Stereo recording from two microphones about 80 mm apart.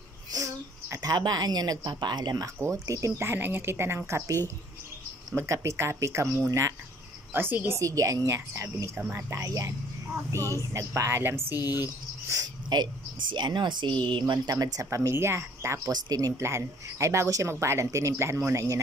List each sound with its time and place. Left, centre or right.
0.3 s a sound: right
1.0 s speech: right
2.4 s speech: right
5.3 s a woman's voice: right
7.8 s a woman's voice: right
11.0 s a woman's voice: right
12.7 s speech: right
13.3 s speech: right
14.0 s speech: right
14.5 s speech: right
15.9 s speech: right